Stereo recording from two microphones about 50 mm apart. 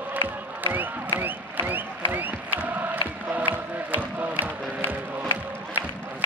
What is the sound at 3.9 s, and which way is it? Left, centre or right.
Music, right.